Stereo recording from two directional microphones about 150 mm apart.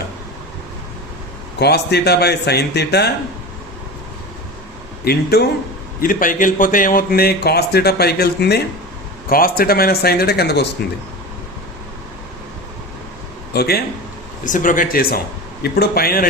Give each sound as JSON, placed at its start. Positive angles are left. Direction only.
{"t": 1.5, "sound": "a man's voice", "side_deg": 90}
{"t": 5.0, "sound": "a man's voice", "side_deg": 90}
{"t": 6.0, "sound": "a man's voice", "side_deg": 65}
{"t": 9.3, "sound": "a man's voice", "side_deg": 75}
{"t": 13.5, "sound": "a man's voice", "side_deg": 90}
{"t": 14.4, "sound": "speech", "side_deg": 60}
{"t": 15.6, "sound": "a man's voice", "side_deg": 90}